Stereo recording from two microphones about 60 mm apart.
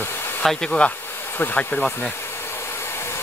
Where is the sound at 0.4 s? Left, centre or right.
Centre.